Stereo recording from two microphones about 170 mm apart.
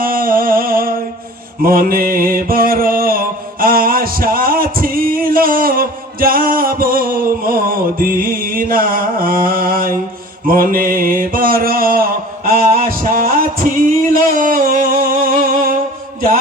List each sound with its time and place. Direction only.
0.0 s music: 55° right (ahead or behind)
1.6 s mantra: 60° right (ahead or behind)
12.5 s music: 60° right (ahead or behind)